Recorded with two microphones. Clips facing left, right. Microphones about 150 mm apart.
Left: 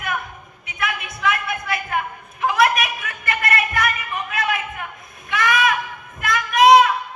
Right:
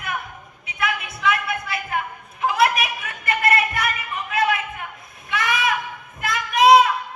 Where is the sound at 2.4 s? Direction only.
30° right (ahead or behind).